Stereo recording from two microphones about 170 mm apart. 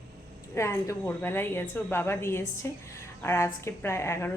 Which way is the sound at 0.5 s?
15° left (ahead or behind).